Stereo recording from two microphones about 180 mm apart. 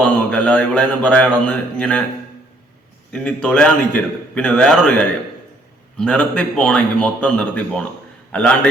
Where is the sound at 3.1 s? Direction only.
5° left (ahead or behind).